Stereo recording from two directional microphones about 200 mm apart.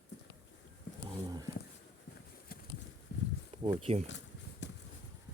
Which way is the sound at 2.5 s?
45° left (ahead or behind).